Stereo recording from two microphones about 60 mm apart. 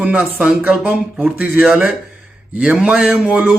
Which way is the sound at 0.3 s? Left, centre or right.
Right.